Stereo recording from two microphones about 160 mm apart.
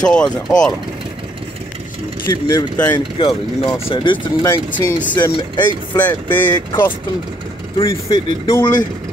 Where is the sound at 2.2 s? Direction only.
25° left (ahead or behind).